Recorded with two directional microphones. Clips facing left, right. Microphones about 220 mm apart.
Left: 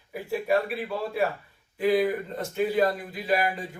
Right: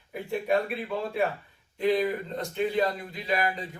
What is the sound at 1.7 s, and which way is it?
Speech, 5° left (ahead or behind).